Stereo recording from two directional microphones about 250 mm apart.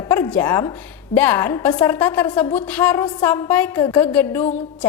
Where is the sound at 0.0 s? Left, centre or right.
Centre.